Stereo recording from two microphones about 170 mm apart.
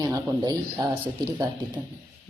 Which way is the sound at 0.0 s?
20° right (ahead or behind).